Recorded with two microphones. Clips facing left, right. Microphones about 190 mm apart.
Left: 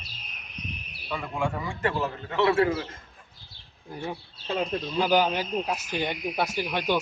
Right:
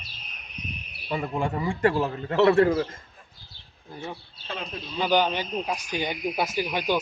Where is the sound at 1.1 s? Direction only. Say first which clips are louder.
Right 2 dB; 35° right (ahead or behind).